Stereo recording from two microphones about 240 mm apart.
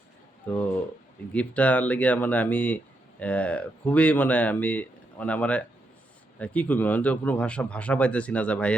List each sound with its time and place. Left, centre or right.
0.5 s speech: centre